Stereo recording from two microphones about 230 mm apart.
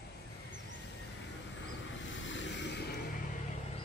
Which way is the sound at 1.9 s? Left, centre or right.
Left.